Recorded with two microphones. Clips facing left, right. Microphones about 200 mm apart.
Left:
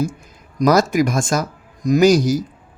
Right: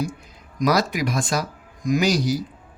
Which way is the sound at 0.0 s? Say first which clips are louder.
Left 5 dB; 45° left (ahead or behind).